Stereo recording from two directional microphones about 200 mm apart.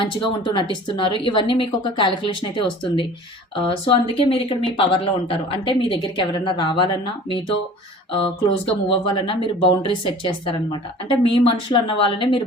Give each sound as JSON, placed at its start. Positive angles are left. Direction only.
{"t": 0.0, "sound": "speech", "side_deg": 25}